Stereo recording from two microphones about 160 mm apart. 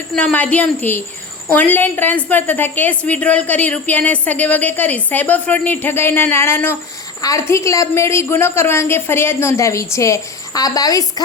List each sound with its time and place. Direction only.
0.1 s a woman's voice: 5° left (ahead or behind); by 11.0 s 20° left (ahead or behind)